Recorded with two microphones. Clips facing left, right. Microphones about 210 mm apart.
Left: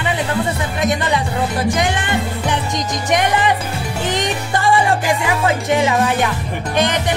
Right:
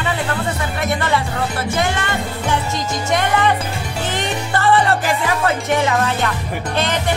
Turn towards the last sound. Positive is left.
turn(degrees=15)  # may be behind; listen again after turning